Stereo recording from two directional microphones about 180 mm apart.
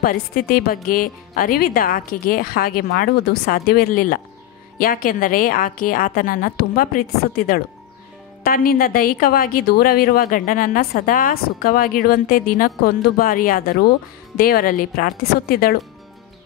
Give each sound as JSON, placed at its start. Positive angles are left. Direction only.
{"t": 0.0, "sound": "a woman's voice", "side_deg": 55}